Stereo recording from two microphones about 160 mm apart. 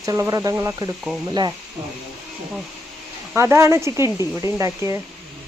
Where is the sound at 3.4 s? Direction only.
15° right (ahead or behind).